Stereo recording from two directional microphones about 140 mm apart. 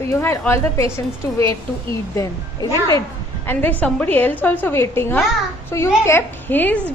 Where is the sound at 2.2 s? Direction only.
25° left (ahead or behind).